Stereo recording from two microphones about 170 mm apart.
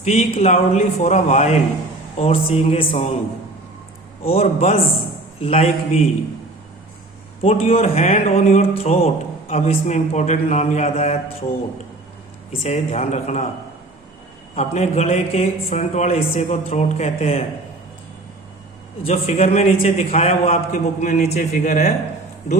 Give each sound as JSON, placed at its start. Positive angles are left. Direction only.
{"t": 0.0, "sound": "speech", "side_deg": 40}
{"t": 4.2, "sound": "speech", "side_deg": 35}
{"t": 7.4, "sound": "speech", "side_deg": 35}
{"t": 12.6, "sound": "speech", "side_deg": 40}
{"t": 14.5, "sound": "speech", "side_deg": 40}
{"t": 19.0, "sound": "speech", "side_deg": 40}